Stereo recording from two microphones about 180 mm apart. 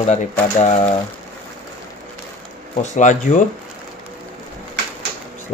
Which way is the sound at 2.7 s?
40° left (ahead or behind).